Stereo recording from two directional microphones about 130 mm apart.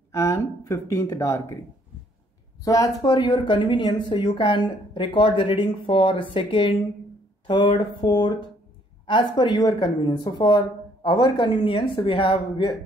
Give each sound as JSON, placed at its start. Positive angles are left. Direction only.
{"t": 0.1, "sound": "speech", "side_deg": 25}
{"t": 2.6, "sound": "speech", "side_deg": 25}